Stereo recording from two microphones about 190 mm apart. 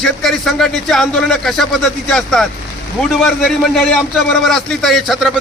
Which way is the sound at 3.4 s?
5° left (ahead or behind).